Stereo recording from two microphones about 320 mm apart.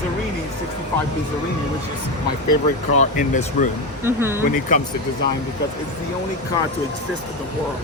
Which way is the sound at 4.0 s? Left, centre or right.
Centre.